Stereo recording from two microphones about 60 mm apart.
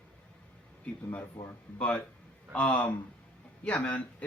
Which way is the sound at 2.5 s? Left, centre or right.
Centre.